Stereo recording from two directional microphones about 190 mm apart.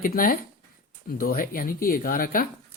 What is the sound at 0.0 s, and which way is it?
Speech, 45° left (ahead or behind).